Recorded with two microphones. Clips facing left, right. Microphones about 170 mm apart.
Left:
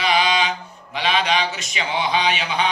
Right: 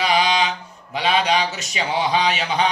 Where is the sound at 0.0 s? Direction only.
40° right (ahead or behind).